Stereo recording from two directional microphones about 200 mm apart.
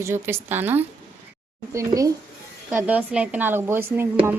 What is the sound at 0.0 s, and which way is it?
A woman's voice, 10° right (ahead or behind).